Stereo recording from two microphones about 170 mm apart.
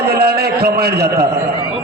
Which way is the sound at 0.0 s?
65° right (ahead or behind).